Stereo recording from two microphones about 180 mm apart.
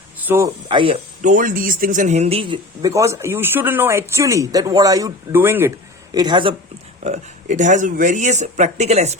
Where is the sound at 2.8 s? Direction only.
15° right (ahead or behind).